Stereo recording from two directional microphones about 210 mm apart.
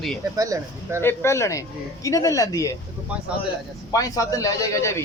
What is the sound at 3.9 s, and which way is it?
Speech, 15° left (ahead or behind).